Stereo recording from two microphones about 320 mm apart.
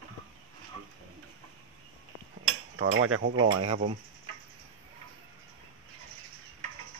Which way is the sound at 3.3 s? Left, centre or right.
Centre.